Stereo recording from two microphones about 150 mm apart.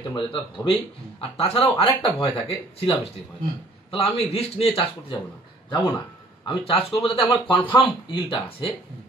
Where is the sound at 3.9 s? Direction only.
40° left (ahead or behind).